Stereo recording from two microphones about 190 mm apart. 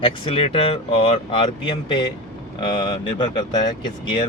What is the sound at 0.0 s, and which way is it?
Speech, 30° left (ahead or behind).